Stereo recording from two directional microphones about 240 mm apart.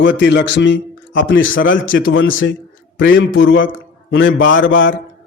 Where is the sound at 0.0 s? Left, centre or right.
Left.